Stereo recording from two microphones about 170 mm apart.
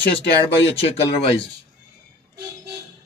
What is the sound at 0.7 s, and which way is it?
Speech, 35° left (ahead or behind).